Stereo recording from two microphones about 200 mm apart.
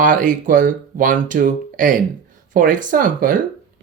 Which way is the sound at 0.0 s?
40° right (ahead or behind).